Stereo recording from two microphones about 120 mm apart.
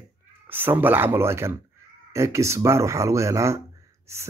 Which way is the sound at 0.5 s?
15° right (ahead or behind).